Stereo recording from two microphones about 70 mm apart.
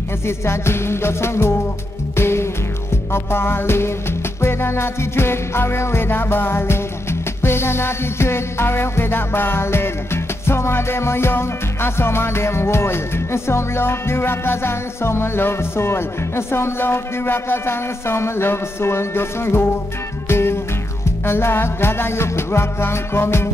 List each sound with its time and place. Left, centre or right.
0.3 s music: left